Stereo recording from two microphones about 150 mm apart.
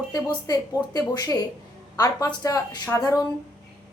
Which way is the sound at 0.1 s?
25° left (ahead or behind).